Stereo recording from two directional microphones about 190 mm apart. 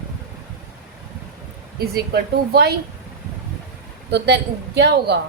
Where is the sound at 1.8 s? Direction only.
55° right (ahead or behind).